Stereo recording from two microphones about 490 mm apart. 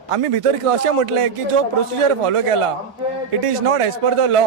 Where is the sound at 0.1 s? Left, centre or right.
Right.